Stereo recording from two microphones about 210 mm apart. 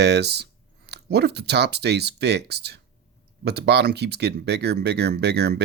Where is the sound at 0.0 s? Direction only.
55° right (ahead or behind).